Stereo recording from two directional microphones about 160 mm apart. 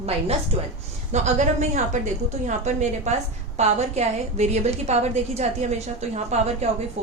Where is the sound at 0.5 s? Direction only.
40° right (ahead or behind).